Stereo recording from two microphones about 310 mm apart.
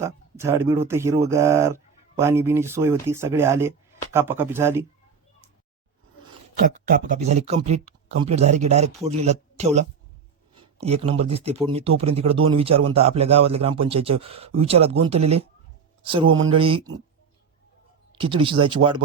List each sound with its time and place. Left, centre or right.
0.0 s speech: centre
6.6 s speech: right
16.3 s speech: right
16.6 s speech: centre
18.2 s speech: centre